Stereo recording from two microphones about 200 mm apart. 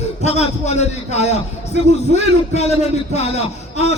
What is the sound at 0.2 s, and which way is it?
A man's voice, 35° left (ahead or behind).